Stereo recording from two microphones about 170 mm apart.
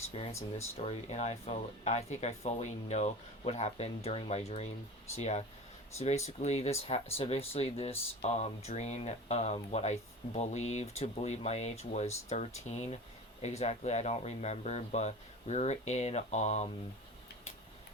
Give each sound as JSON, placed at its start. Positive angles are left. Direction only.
{"t": 0.1, "sound": "speech", "side_deg": 35}